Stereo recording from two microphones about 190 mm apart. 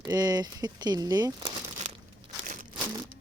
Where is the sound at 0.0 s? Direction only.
20° right (ahead or behind).